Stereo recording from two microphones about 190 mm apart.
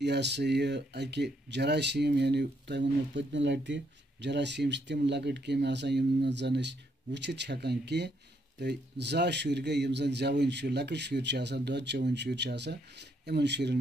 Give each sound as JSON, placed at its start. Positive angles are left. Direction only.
{"t": 0.0, "sound": "speech", "side_deg": -65}